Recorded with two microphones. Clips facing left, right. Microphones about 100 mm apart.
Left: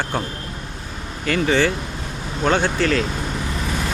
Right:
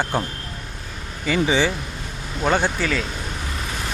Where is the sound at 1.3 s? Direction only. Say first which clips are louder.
Left 1 dB; 10° right (ahead or behind).